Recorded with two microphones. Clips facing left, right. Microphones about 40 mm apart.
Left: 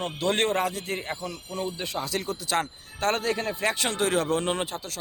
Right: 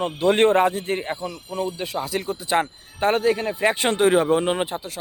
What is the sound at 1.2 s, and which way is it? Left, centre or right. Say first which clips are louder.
Speech: right 5 dB; centre.